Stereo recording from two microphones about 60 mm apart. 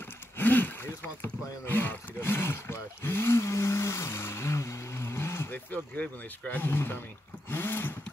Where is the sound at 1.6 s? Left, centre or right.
Left.